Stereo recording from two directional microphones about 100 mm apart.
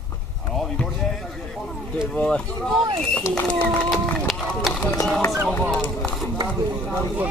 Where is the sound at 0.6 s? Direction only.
5° left (ahead or behind).